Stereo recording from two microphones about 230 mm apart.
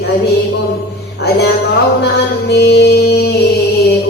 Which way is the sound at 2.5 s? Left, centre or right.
Left.